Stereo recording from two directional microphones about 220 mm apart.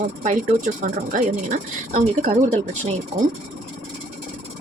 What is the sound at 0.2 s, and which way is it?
A woman's voice, 35° right (ahead or behind).